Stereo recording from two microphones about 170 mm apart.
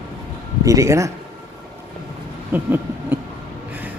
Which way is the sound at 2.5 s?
10° right (ahead or behind).